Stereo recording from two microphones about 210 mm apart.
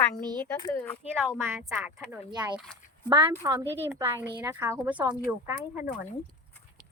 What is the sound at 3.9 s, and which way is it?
Speech, 10° right (ahead or behind).